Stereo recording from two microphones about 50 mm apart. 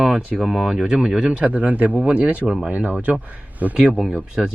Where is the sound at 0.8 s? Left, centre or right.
Centre.